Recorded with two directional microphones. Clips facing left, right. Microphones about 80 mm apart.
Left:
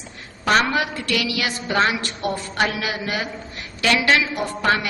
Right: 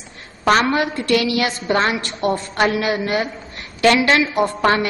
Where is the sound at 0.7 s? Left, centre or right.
Right.